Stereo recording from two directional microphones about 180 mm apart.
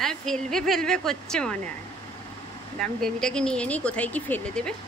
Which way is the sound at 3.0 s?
5° left (ahead or behind).